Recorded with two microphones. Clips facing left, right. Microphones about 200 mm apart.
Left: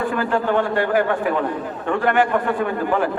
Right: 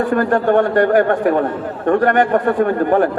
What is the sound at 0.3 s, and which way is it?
A man's voice, 45° right (ahead or behind).